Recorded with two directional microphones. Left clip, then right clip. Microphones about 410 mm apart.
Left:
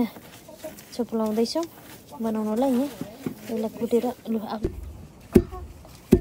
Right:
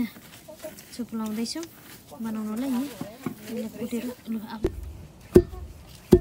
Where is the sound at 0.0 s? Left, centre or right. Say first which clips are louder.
Left 4 dB; centre.